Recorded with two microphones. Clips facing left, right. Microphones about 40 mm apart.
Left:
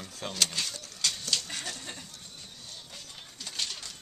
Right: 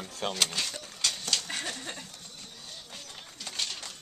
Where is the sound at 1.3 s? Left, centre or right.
Right.